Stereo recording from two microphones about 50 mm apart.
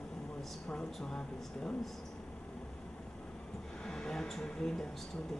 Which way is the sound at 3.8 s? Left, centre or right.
Centre.